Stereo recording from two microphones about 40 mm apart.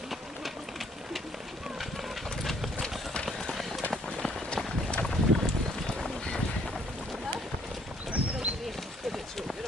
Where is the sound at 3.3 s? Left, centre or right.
Centre.